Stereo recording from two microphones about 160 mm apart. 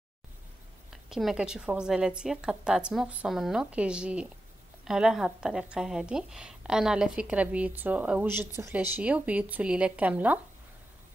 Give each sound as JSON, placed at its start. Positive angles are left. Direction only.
{"t": 1.0, "sound": "a woman's voice", "side_deg": 0}